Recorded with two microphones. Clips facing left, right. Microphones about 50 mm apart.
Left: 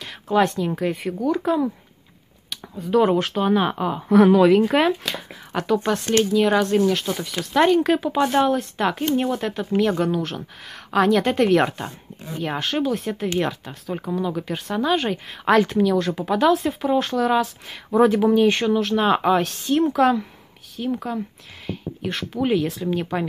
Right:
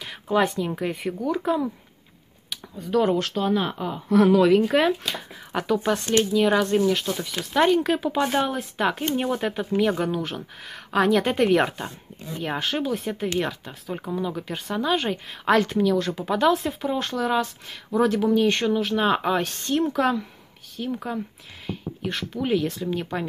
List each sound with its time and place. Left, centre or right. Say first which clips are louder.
0.0 s speech: left 3 dB; centre
3.2 s speech: left 4 dB; left
4.1 s speech: left 3 dB; left
4.6 s speech: left 2 dB; centre
8.3 s speech: left 5 dB; centre
18.0 s speech: left 4 dB; centre